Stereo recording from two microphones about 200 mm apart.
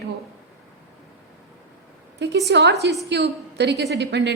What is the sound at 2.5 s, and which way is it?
A woman's voice, 55° right (ahead or behind).